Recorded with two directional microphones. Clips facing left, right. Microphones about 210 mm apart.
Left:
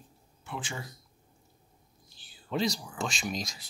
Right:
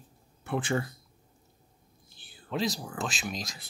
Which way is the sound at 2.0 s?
55° right (ahead or behind).